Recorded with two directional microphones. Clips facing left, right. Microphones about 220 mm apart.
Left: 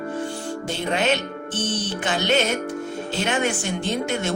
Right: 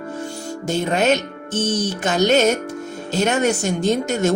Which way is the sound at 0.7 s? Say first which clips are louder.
Right 5 dB; 45° right (ahead or behind).